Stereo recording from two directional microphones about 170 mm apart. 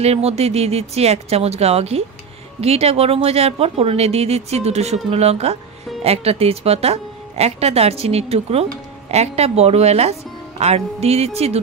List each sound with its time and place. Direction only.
0.0 s speech: 35° right (ahead or behind)